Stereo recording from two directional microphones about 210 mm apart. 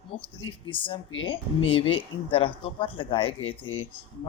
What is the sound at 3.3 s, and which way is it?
Speech, 75° left (ahead or behind).